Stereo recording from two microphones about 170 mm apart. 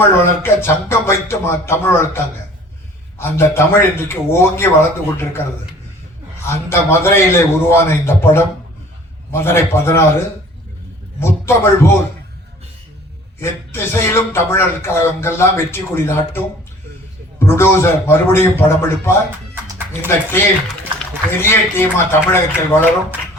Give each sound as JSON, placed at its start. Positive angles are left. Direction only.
{"t": 0.1, "sound": "speech", "side_deg": 15}
{"t": 6.5, "sound": "speech", "side_deg": 15}
{"t": 11.2, "sound": "a man's voice", "side_deg": 15}
{"t": 13.4, "sound": "speech", "side_deg": 15}
{"t": 17.4, "sound": "speech", "side_deg": 15}
{"t": 20.3, "sound": "speech", "side_deg": 10}